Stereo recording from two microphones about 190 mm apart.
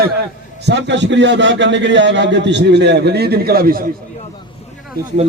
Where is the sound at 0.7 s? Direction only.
65° right (ahead or behind); by 3.8 s 50° right (ahead or behind).